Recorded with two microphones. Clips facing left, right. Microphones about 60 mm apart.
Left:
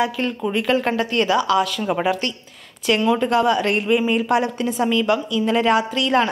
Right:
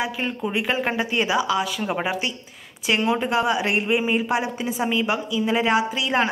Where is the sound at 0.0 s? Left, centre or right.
Centre.